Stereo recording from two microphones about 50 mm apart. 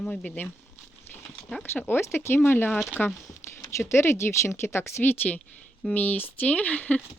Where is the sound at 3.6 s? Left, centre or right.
Left.